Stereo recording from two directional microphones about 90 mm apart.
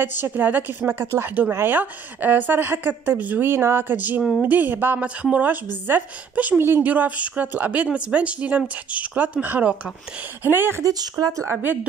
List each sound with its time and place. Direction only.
0.0 s a woman's voice: 20° right (ahead or behind)
10.8 s speech: 45° right (ahead or behind)